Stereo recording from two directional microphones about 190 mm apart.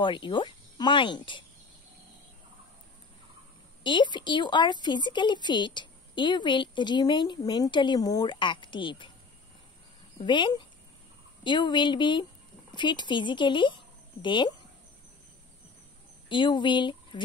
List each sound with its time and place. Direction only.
0.0 s a woman's voice: 25° left (ahead or behind)
3.8 s a woman's voice: 25° left (ahead or behind)
10.1 s a woman's voice: 25° left (ahead or behind)
16.3 s speech: 25° left (ahead or behind)